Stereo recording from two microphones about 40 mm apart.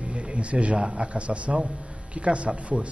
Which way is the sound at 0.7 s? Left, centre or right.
Right.